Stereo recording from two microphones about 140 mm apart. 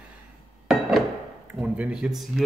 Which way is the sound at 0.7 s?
Centre (ahead or behind).